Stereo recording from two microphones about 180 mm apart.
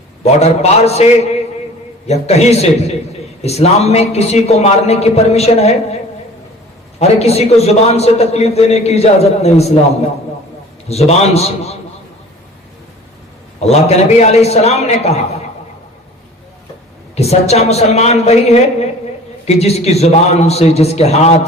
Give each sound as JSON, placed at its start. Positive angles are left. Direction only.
{"t": 0.3, "sound": "a man's voice", "side_deg": 35}
{"t": 7.0, "sound": "a man's voice", "side_deg": 35}
{"t": 10.8, "sound": "a man's voice", "side_deg": 35}
{"t": 13.6, "sound": "a man's voice", "side_deg": 35}
{"t": 17.2, "sound": "a man's voice", "side_deg": 35}